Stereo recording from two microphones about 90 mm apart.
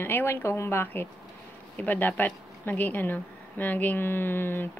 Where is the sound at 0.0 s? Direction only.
25° left (ahead or behind).